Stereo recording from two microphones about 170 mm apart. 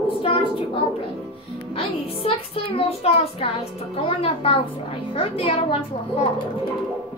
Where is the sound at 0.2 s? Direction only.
30° left (ahead or behind).